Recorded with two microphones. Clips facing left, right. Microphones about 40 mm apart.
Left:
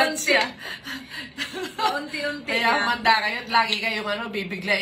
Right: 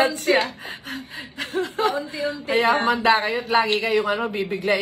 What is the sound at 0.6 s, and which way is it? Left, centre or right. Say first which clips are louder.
Speech: right 1 dB; right.